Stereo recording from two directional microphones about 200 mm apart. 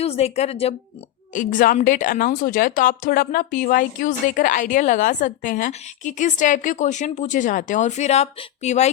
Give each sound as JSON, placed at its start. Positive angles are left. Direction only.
{"t": 0.0, "sound": "a woman's voice", "side_deg": 30}